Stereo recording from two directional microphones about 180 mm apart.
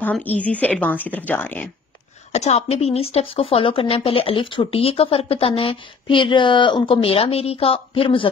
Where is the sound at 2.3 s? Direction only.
40° left (ahead or behind).